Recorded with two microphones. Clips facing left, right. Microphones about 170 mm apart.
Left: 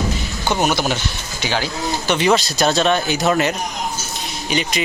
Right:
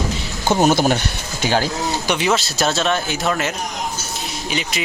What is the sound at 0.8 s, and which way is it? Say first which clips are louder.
Speech: right 4 dB; 50° right (ahead or behind).